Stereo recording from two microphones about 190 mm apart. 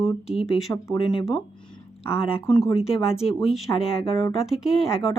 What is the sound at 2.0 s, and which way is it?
Speech, 30° left (ahead or behind).